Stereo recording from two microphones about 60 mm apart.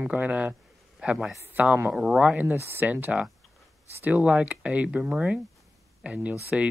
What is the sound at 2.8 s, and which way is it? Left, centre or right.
Speech, right.